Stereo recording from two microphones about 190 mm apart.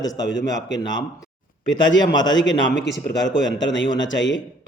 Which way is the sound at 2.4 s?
80° left.